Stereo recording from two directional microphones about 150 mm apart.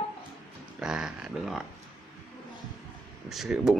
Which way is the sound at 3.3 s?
5° right (ahead or behind).